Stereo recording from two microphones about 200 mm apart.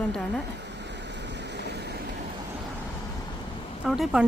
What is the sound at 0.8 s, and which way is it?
Vehicle, 60° right (ahead or behind).